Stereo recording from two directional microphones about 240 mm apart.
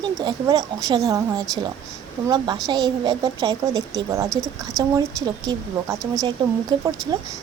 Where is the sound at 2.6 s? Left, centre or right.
Centre.